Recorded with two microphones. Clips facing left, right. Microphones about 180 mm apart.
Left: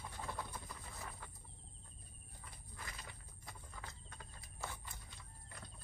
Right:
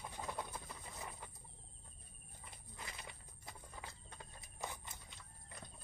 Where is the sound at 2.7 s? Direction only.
20° right (ahead or behind).